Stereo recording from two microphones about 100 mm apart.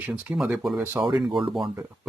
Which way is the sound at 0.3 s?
5° right (ahead or behind).